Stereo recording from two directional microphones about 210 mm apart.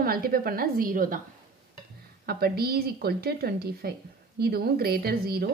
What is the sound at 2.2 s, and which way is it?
Speech, 45° right (ahead or behind).